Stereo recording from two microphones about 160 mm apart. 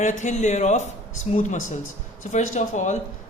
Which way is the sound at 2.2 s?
50° left (ahead or behind).